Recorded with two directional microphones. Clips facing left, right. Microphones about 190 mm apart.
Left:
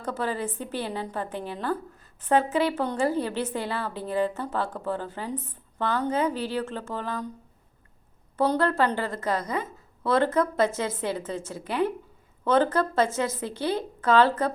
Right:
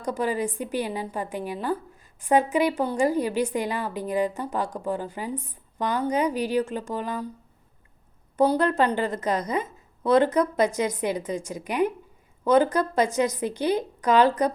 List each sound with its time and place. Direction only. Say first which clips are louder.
0.0 s a woman's voice: right 3 dB; 15° right (ahead or behind)
8.4 s a woman's voice: right 2 dB; 15° right (ahead or behind)